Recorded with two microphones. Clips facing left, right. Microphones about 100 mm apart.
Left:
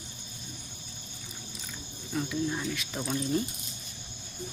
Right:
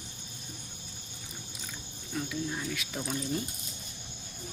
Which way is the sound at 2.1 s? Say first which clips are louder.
Left 4 dB; 5° left (ahead or behind).